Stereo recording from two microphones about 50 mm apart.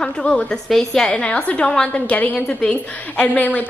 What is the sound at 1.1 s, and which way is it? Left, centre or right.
A woman's voice, left.